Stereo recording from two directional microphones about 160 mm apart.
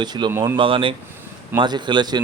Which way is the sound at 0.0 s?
25° right (ahead or behind).